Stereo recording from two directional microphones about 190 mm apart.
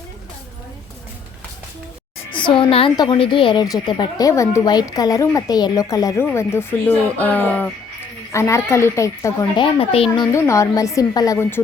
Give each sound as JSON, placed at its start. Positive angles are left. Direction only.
{"t": 2.3, "sound": "a woman's voice", "side_deg": 25}
{"t": 9.7, "sound": "a woman's voice", "side_deg": 30}
{"t": 10.3, "sound": "a woman's voice", "side_deg": 15}